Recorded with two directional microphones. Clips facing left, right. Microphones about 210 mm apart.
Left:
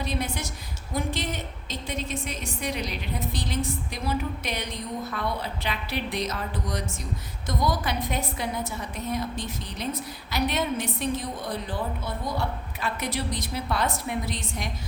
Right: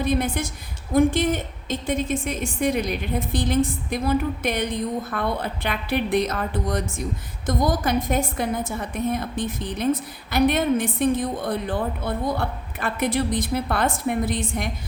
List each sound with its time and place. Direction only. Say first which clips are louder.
0.0 s a woman's voice: right 7 dB; 55° right (ahead or behind)